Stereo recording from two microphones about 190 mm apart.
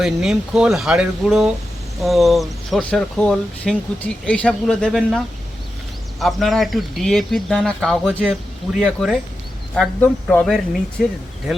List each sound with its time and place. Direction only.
0.0 s speech: centre (ahead or behind)